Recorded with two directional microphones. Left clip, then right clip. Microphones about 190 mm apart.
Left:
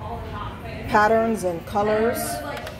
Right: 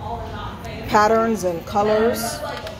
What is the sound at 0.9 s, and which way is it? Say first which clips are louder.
Speech: right 2 dB; centre (ahead or behind).